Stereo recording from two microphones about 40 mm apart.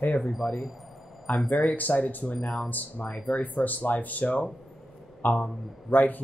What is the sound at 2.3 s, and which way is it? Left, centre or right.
Speech, centre.